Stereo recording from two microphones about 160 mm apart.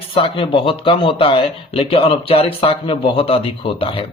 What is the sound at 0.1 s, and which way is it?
A man's voice, 35° left (ahead or behind).